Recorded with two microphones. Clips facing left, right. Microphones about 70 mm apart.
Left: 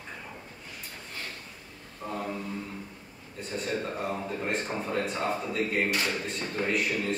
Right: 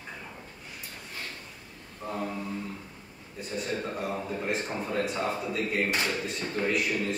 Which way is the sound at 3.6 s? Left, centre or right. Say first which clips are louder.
Left 1 dB; centre.